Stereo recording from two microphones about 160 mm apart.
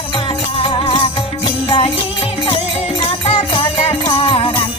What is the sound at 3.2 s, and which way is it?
Music, 35° left (ahead or behind).